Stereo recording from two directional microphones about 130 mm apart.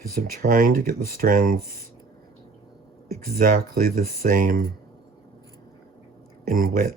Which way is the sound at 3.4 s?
90° right.